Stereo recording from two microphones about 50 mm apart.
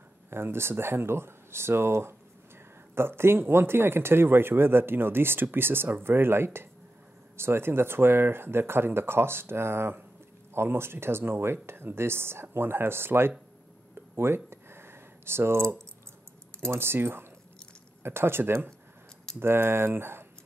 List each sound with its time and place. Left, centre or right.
0.3 s speech: right
14.1 s a sound: right
16.6 s speech: right